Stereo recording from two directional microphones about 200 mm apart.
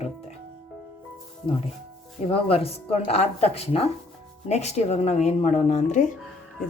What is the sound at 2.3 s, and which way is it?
A woman's voice, 30° left (ahead or behind).